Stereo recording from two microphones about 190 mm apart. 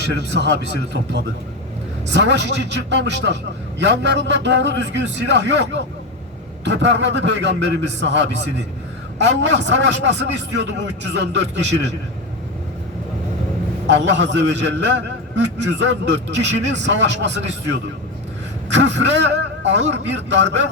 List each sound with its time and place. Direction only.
0.0 s a man's voice: 65° right (ahead or behind)
13.8 s a man's voice: 70° right (ahead or behind)
18.7 s a man's voice: 70° right (ahead or behind)